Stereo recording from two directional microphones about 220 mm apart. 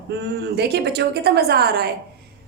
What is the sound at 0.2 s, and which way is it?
A woman's voice, 50° right (ahead or behind).